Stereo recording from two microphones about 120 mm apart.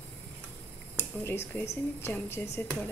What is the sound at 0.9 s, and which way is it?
Speech, 20° left (ahead or behind).